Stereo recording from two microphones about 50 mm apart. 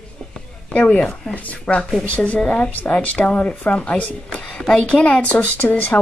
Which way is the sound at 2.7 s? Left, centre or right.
Left.